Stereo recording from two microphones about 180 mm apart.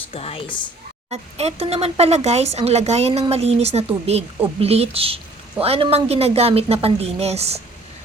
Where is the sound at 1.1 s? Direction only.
35° right (ahead or behind).